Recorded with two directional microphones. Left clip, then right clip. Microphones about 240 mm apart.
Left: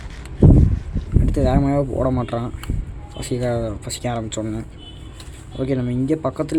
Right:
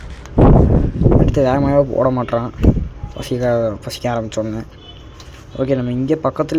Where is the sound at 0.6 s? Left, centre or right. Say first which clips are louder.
Right 13 dB; centre.